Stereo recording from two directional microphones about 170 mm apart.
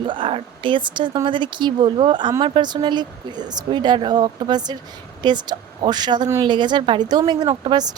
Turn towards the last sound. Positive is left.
turn(degrees=-25)  # may be behind; listen again after turning